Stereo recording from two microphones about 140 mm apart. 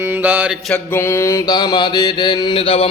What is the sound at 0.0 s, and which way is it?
Mantra, 15° right (ahead or behind).